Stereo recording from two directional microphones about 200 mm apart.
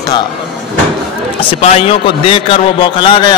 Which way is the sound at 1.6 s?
30° left (ahead or behind).